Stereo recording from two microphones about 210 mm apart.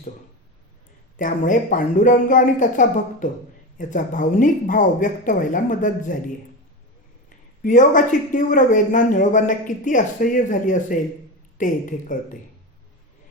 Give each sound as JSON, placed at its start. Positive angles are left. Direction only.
{"t": 1.1, "sound": "speech", "side_deg": 40}
{"t": 7.3, "sound": "speech", "side_deg": 40}